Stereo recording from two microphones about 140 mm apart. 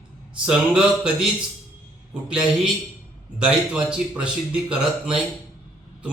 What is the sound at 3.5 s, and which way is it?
Speech, 10° right (ahead or behind).